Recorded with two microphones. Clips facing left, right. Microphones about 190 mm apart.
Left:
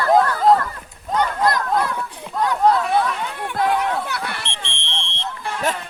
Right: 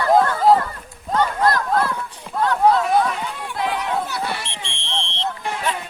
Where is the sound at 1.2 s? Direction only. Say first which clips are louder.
Right 1 dB; 15° left (ahead or behind).